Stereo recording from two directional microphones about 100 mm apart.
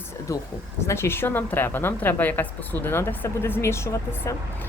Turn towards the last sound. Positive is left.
turn(degrees=25)  # may be behind; listen again after turning